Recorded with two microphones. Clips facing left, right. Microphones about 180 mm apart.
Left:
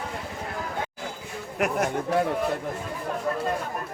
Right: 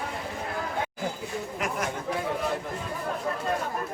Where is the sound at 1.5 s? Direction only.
60° left (ahead or behind).